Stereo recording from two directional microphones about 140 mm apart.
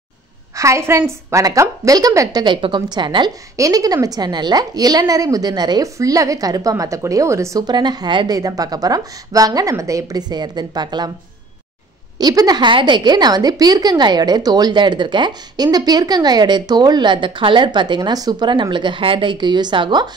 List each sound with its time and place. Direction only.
0.6 s a woman's voice: 20° right (ahead or behind)
12.2 s a woman's voice: 30° right (ahead or behind)